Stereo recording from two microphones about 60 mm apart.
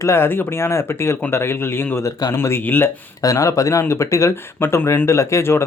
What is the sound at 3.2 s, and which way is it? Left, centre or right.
Speech, left.